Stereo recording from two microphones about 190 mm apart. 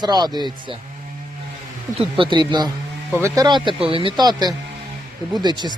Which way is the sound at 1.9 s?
25° right (ahead or behind).